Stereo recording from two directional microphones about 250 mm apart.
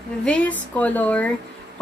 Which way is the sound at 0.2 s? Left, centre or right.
Centre.